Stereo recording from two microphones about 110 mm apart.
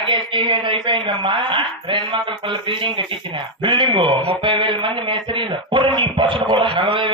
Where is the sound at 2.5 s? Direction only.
50° right (ahead or behind).